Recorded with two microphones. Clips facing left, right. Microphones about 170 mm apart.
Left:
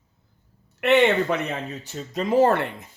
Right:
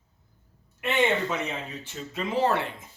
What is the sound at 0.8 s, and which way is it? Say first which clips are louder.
Speech: left 7 dB; 70° left (ahead or behind).